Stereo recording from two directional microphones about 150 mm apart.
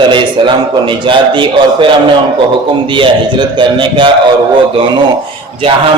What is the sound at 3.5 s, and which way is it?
Speech, 30° right (ahead or behind).